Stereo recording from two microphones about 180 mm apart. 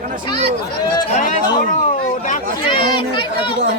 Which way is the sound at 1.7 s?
45° left (ahead or behind).